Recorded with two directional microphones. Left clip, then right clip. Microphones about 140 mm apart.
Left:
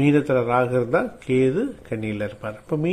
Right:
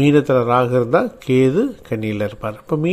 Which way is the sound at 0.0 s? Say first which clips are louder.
Right 5 dB; 30° right (ahead or behind).